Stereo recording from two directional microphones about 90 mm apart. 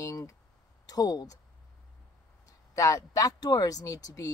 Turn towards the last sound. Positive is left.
turn(degrees=40)  # may be behind; listen again after turning